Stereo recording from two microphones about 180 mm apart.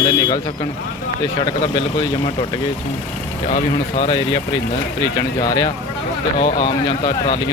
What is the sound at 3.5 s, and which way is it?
Speech, 35° left (ahead or behind).